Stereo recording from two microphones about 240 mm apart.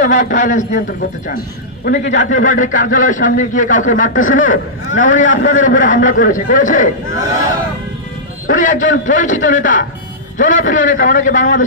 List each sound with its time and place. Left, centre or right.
0.0 s speech: left
1.9 s a man's voice: left
2.2 s speech: left
8.5 s speech: left